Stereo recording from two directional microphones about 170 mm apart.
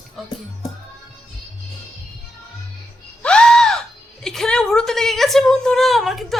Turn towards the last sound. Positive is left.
turn(degrees=0)  # may be behind; listen again after turning